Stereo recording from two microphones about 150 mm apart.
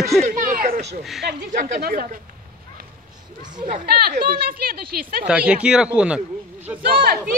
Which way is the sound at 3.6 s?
75° right (ahead or behind).